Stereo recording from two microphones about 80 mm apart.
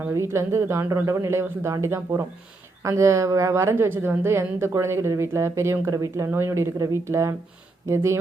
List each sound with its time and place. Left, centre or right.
0.1 s a woman's voice: right
6.2 s a woman's voice: right